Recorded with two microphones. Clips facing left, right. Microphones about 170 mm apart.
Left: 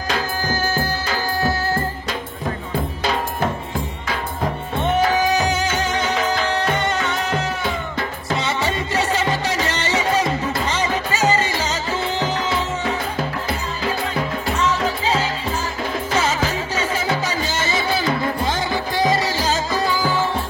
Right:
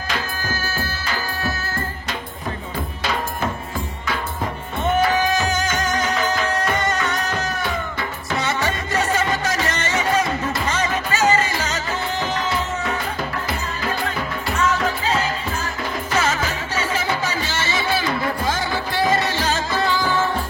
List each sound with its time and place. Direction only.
5.1 s music: 30° left (ahead or behind)
9.4 s music: 35° left (ahead or behind)
14.0 s music: 30° left (ahead or behind)
18.2 s music: 20° left (ahead or behind)
19.0 s music: 35° left (ahead or behind)